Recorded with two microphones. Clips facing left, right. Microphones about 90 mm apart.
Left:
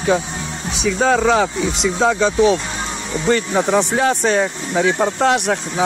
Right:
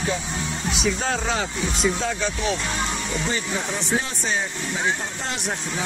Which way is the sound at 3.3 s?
70° left (ahead or behind).